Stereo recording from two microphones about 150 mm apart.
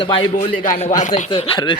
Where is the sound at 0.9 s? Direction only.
55° left (ahead or behind).